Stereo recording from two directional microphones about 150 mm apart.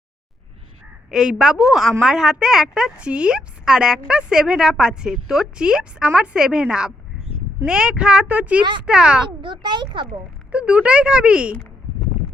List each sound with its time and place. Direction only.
1.1 s a woman's voice: centre (ahead or behind)
9.4 s a child's voice: 30° right (ahead or behind)
10.5 s speech: 10° right (ahead or behind)